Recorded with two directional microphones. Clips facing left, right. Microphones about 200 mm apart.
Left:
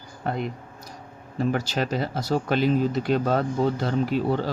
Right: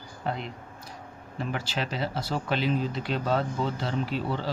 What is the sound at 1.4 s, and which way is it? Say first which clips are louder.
Speech: left 7 dB; 45° left (ahead or behind).